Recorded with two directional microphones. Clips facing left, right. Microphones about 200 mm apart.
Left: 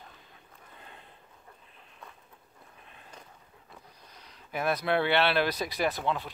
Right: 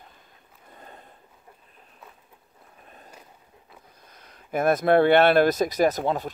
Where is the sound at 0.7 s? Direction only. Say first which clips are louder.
Right 6 dB; 45° right (ahead or behind).